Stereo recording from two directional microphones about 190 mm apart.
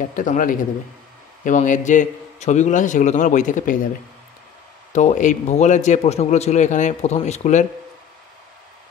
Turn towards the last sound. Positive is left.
turn(degrees=40)  # may be behind; listen again after turning